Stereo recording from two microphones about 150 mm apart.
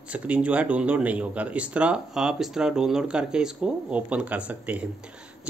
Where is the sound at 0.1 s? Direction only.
10° right (ahead or behind).